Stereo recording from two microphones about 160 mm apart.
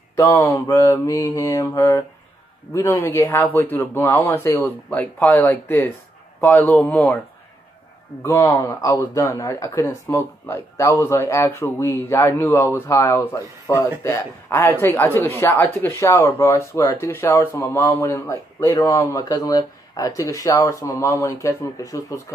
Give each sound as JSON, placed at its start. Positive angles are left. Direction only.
{"t": 0.1, "sound": "speech", "side_deg": 15}
{"t": 8.2, "sound": "speech", "side_deg": 15}